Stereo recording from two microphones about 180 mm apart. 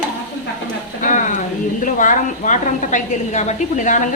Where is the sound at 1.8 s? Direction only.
45° left (ahead or behind).